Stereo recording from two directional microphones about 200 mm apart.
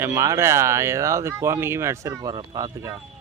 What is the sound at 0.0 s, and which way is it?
Speech, 15° right (ahead or behind).